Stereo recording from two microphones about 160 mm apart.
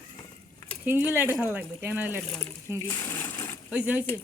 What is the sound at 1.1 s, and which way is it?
Speech, 10° right (ahead or behind).